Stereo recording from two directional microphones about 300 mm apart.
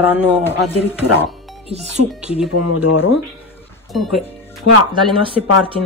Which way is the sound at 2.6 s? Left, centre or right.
Left.